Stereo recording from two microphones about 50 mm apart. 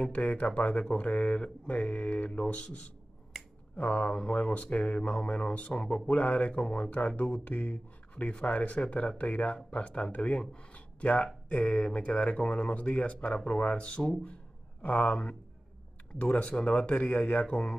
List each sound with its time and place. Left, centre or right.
0.0 s speech: left
10.5 s a sound: left
11.4 s speech: left
16.2 s speech: left
17.0 s speech: centre